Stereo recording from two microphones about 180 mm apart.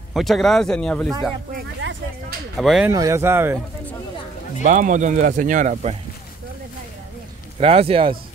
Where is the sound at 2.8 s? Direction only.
20° right (ahead or behind).